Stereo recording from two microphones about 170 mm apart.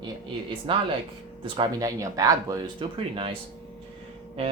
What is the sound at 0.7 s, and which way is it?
Speech, 30° right (ahead or behind).